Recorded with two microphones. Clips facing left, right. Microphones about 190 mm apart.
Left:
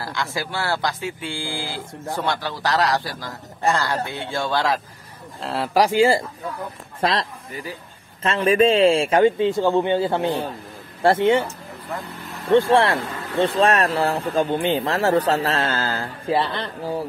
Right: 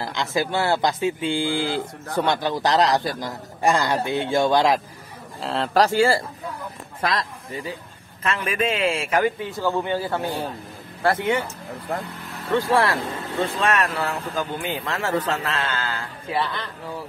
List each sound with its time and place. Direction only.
0.0 s a man's voice: 20° right (ahead or behind)
5.4 s a man's voice: 5° left (ahead or behind); by 11.4 s 25° left (ahead or behind)
12.6 s a man's voice: 25° left (ahead or behind)